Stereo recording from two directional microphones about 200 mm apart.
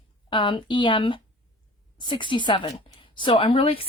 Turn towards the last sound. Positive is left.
turn(degrees=25)  # may be behind; listen again after turning